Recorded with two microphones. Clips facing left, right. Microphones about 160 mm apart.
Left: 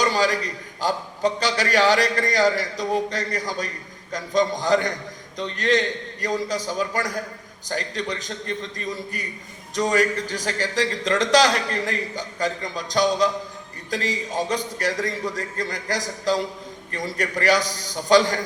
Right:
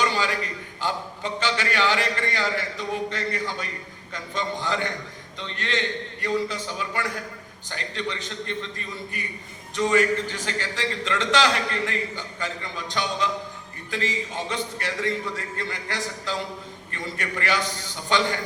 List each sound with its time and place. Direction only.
0.0 s a man's voice: 40° left (ahead or behind)